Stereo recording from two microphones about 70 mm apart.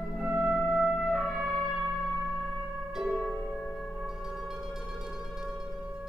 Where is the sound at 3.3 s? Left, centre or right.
Left.